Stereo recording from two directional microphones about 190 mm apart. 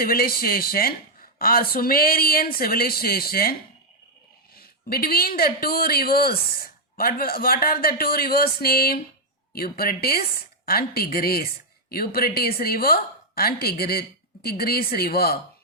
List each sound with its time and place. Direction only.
0.0 s speech: 50° left (ahead or behind)
4.5 s speech: 50° left (ahead or behind)